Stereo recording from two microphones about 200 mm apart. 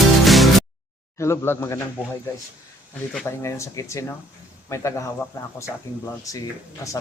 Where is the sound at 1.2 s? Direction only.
15° left (ahead or behind).